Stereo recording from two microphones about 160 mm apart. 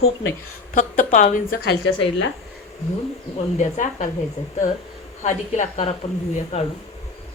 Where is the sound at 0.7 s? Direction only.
55° left (ahead or behind).